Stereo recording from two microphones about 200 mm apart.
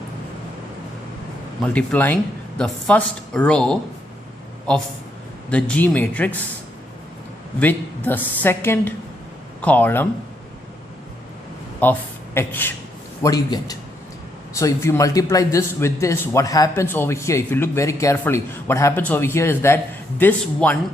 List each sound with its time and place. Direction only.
1.6 s a man's voice: 5° left (ahead or behind)
7.6 s a man's voice: 10° left (ahead or behind)
11.8 s a man's voice: 10° left (ahead or behind)